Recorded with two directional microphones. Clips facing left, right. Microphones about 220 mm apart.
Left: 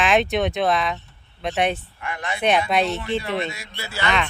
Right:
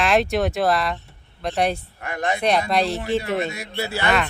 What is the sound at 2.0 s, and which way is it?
Speech, 40° right (ahead or behind).